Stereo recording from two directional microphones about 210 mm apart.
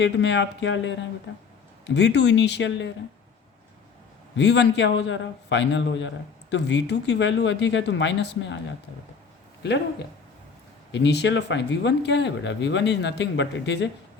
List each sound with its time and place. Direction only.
0.0 s speech: 60° left (ahead or behind)
4.4 s speech: 55° left (ahead or behind)
9.6 s speech: 55° left (ahead or behind)